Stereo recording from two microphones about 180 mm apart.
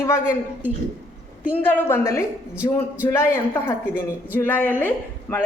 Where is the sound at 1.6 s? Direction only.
10° left (ahead or behind).